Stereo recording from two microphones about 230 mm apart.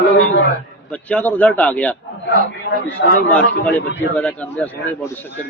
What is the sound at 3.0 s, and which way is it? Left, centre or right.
Speech, left.